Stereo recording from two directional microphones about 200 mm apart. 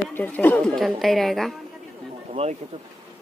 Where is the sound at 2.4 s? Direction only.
30° right (ahead or behind).